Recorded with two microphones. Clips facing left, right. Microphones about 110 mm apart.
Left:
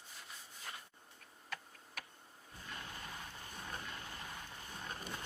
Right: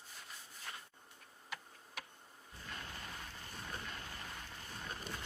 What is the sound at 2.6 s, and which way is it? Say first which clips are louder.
Vehicle: even; 15° left (ahead or behind).